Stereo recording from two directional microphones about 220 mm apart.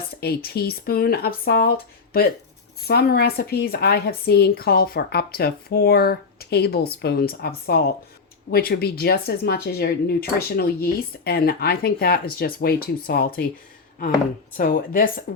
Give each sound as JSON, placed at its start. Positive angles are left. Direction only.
{"t": 0.2, "sound": "speech", "side_deg": 45}
{"t": 14.5, "sound": "a woman's voice", "side_deg": 40}